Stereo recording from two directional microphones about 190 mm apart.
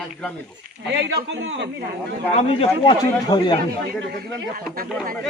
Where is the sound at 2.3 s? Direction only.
30° left (ahead or behind).